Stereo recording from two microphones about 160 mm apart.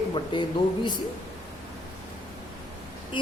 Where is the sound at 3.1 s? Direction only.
30° left (ahead or behind).